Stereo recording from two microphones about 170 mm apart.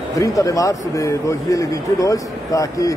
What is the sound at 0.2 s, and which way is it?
A man's voice, 20° left (ahead or behind).